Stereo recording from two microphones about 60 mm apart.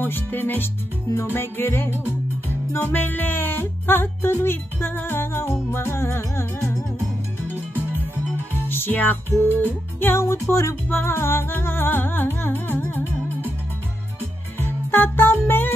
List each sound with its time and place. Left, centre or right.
0.0 s music: left
8.6 s music: left
10.2 s music: left
14.6 s music: left